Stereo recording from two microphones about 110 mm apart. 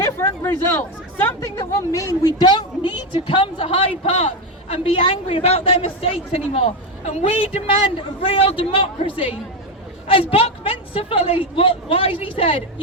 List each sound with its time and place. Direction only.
0.0 s chatter: 20° left (ahead or behind)
1.9 s speech: 30° left (ahead or behind)
3.2 s a woman's voice: 50° left (ahead or behind)